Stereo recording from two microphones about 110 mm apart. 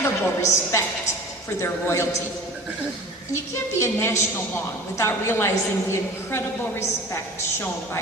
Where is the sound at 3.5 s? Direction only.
25° left (ahead or behind).